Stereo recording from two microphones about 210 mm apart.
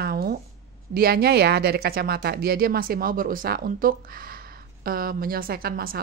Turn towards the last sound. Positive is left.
turn(degrees=-45)  # may be behind; listen again after turning